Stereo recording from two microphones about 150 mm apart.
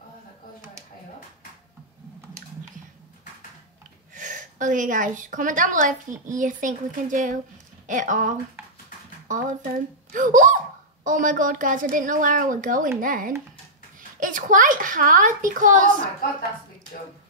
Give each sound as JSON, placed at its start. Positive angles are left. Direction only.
{"t": 4.1, "sound": "a woman's voice", "side_deg": -55}